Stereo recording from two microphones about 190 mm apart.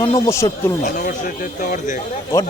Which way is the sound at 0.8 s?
40° left (ahead or behind).